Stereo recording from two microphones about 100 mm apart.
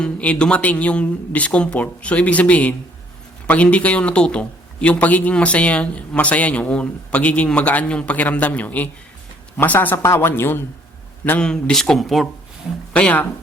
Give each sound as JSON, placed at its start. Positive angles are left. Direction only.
{"t": 0.0, "sound": "speech", "side_deg": 10}
{"t": 11.3, "sound": "speech", "side_deg": 10}
{"t": 12.9, "sound": "speech", "side_deg": 15}